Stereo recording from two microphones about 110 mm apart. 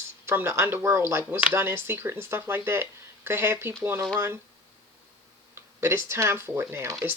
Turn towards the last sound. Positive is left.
turn(degrees=-25)  # may be behind; listen again after turning